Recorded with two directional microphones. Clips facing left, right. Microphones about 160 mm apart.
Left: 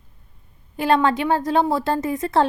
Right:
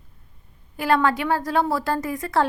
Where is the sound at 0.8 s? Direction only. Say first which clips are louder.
Left 2 dB; 25° left (ahead or behind).